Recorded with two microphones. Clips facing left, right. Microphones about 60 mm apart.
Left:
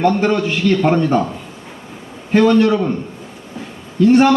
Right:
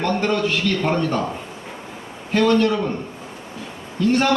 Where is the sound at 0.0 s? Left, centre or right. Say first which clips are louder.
Left 5 dB; centre.